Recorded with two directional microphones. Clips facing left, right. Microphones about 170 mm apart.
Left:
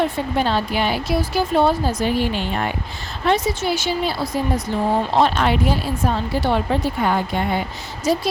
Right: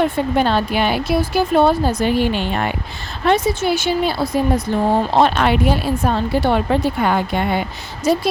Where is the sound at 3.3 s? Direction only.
55° right (ahead or behind).